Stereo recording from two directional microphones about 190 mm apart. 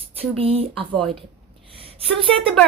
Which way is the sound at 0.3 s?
30° right (ahead or behind).